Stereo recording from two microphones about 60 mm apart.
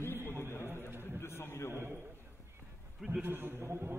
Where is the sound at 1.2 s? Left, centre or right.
Left.